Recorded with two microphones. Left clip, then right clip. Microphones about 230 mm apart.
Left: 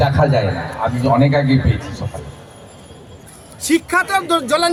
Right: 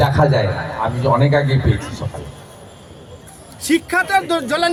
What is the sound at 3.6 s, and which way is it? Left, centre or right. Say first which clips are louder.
Speech: left 1 dB; centre.